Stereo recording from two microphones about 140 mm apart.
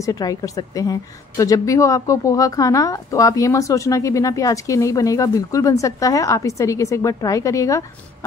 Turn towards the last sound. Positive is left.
turn(degrees=20)  # may be behind; listen again after turning